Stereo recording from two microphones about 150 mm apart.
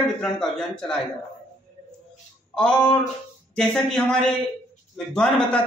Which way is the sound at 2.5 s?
5° left (ahead or behind).